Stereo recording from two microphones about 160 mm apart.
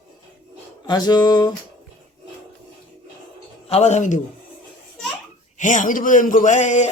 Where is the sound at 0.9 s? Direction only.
25° left (ahead or behind).